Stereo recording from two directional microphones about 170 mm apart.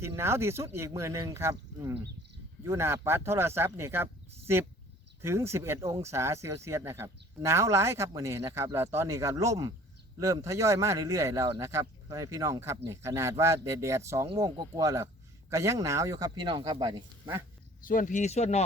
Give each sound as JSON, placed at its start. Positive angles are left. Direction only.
{"t": 0.2, "sound": "speech", "side_deg": -15}
{"t": 17.8, "sound": "speech", "side_deg": 50}